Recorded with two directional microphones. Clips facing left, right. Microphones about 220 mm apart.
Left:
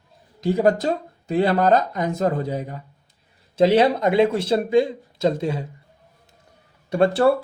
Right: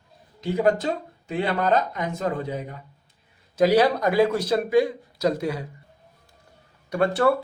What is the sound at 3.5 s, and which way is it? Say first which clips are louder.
Speech: left 2 dB; 25° left (ahead or behind).